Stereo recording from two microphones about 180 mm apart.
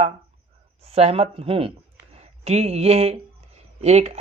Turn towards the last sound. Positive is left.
turn(degrees=-40)  # may be behind; listen again after turning